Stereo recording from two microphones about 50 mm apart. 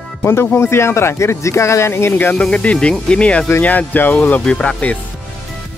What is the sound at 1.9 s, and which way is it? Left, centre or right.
Speech, left.